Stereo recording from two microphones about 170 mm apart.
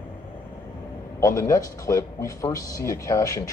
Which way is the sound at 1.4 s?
20° left (ahead or behind).